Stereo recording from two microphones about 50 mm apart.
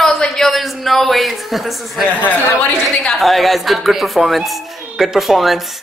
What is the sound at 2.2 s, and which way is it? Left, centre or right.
Speech, left.